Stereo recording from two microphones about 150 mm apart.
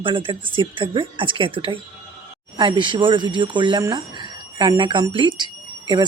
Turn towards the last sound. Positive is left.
turn(degrees=-30)  # may be behind; listen again after turning